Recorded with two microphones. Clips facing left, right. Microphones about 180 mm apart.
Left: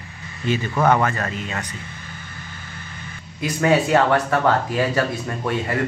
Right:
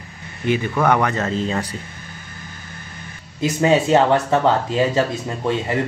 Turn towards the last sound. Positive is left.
turn(degrees=-20)  # may be behind; listen again after turning